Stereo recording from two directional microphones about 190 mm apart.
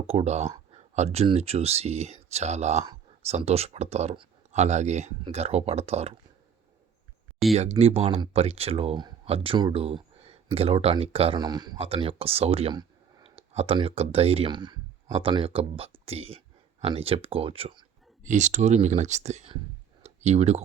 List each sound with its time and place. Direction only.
0.1 s speech: 35° right (ahead or behind)
7.5 s speech: 35° right (ahead or behind)
18.2 s speech: 40° right (ahead or behind)
20.0 s a sound: 35° right (ahead or behind)